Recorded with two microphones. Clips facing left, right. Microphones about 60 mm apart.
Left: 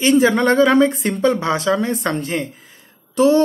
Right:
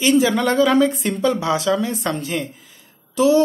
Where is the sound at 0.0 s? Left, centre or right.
Left.